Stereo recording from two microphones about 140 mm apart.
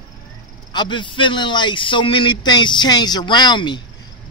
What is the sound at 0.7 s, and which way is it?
A man's voice, 35° left (ahead or behind).